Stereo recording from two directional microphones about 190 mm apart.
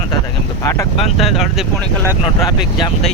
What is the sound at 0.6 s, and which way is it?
Speech, 15° left (ahead or behind).